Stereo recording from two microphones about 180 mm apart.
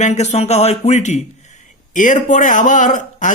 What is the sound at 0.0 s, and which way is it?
A man's voice, 40° left (ahead or behind).